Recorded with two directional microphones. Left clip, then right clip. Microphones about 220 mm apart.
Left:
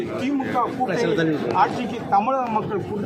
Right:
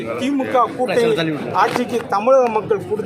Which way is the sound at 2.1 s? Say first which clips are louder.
Right 6 dB; 50° right (ahead or behind).